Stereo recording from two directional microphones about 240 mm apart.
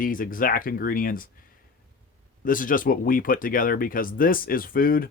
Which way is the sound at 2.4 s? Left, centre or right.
Left.